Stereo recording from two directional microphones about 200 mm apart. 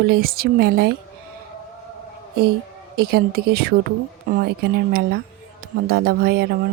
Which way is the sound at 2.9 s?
50° right (ahead or behind).